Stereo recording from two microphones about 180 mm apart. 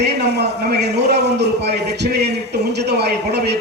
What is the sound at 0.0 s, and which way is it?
A man's voice, 65° right (ahead or behind).